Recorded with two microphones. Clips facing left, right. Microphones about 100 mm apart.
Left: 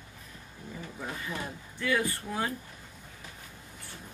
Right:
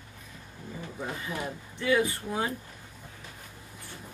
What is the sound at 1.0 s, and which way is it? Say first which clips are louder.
Speech: right 3 dB; 10° right (ahead or behind).